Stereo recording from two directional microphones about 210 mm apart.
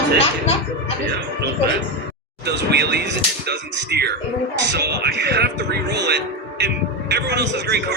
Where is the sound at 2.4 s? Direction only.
50° right (ahead or behind).